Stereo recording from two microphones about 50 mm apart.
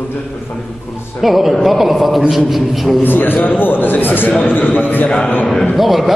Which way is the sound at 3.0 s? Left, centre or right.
Left.